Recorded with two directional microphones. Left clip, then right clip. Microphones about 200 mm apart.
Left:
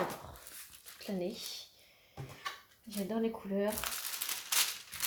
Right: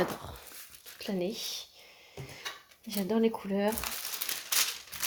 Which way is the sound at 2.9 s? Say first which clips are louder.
Right 7 dB; 50° right (ahead or behind).